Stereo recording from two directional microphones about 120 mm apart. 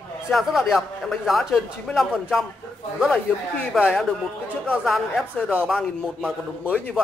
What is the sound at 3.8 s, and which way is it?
Speech, centre (ahead or behind).